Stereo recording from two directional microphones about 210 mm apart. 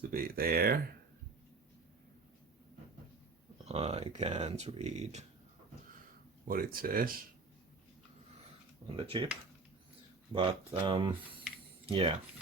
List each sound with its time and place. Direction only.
0.0 s a sound: 45° right (ahead or behind)
3.7 s speech: 30° right (ahead or behind)
6.5 s speech: 45° right (ahead or behind)
9.0 s speech: 25° right (ahead or behind)
10.3 s speech: 25° right (ahead or behind)